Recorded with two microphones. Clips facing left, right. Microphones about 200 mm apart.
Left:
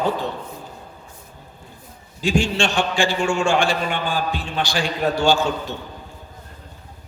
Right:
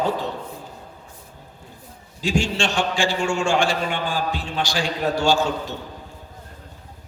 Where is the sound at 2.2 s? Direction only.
60° left (ahead or behind).